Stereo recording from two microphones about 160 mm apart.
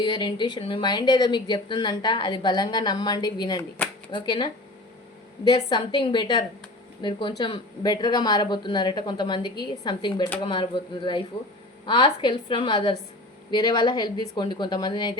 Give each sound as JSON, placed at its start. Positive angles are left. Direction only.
{"t": 0.0, "sound": "speech", "side_deg": 30}
{"t": 5.5, "sound": "a woman's voice", "side_deg": 25}